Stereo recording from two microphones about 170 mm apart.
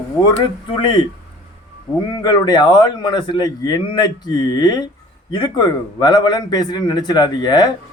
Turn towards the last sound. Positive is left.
turn(degrees=25)  # may be behind; listen again after turning